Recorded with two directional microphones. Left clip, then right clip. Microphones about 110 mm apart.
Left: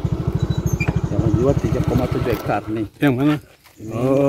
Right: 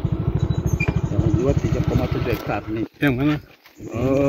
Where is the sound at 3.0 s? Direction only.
35° left (ahead or behind).